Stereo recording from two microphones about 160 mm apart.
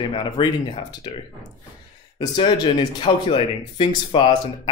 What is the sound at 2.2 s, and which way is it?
Speech, 30° left (ahead or behind).